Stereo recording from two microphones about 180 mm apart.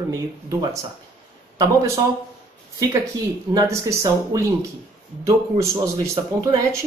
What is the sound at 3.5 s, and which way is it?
Speech, 15° right (ahead or behind).